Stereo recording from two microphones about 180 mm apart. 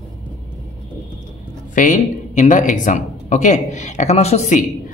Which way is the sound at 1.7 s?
45° left (ahead or behind).